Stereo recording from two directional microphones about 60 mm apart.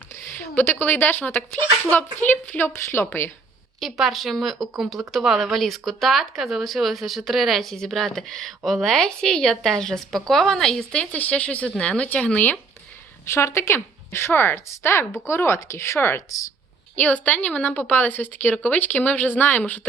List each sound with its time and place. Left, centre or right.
0.2 s a woman's voice: left
3.8 s a woman's voice: centre; by 12.5 s left
13.2 s a woman's voice: left
16.9 s a woman's voice: left